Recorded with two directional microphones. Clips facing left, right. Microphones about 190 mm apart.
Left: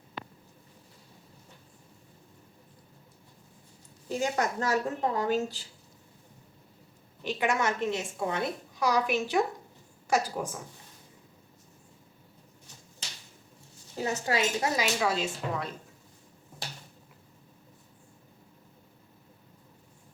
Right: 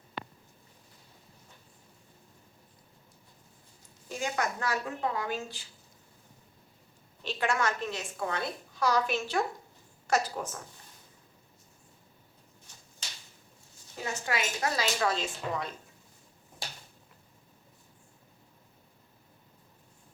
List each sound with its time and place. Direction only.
4.1 s a woman's voice: 40° left (ahead or behind)
7.2 s a woman's voice: 15° left (ahead or behind)
13.9 s a woman's voice: 35° left (ahead or behind)
14.6 s speech: 20° left (ahead or behind)
14.9 s a woman's voice: 10° left (ahead or behind)